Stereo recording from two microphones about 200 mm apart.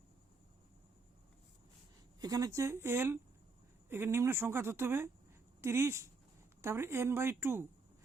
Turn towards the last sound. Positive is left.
turn(degrees=-10)  # may be behind; listen again after turning